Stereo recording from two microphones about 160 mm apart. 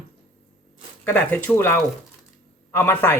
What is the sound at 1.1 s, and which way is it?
Speech, 10° left (ahead or behind).